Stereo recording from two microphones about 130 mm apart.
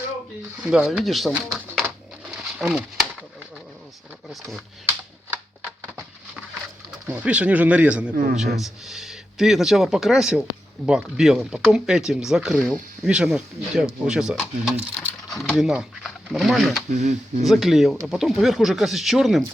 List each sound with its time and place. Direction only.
0.6 s speech: 5° right (ahead or behind)
1.3 s a sound: 5° right (ahead or behind)
4.3 s speech: centre (ahead or behind)
7.1 s speech: 10° right (ahead or behind)
16.9 s speech: 65° right (ahead or behind)
17.4 s speech: centre (ahead or behind)